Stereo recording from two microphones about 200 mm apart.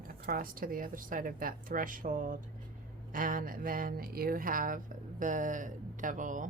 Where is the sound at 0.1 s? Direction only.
45° right (ahead or behind).